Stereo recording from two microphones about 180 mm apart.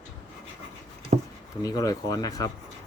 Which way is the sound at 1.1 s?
45° right (ahead or behind).